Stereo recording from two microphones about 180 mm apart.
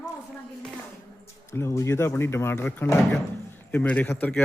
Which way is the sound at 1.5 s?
15° left (ahead or behind).